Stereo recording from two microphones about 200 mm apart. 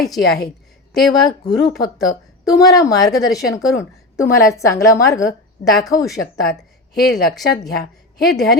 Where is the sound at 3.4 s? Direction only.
15° left (ahead or behind).